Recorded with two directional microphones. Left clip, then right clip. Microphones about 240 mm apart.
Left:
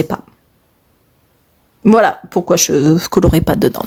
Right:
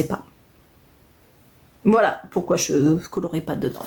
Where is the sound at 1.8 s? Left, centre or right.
Left.